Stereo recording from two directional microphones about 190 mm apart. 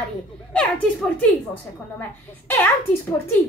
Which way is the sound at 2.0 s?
10° left (ahead or behind).